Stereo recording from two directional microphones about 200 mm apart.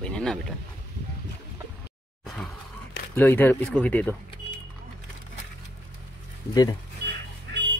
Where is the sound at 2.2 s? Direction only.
Centre (ahead or behind).